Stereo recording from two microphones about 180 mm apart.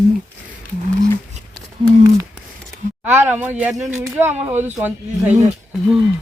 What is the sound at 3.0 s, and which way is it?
A man's voice, 10° right (ahead or behind).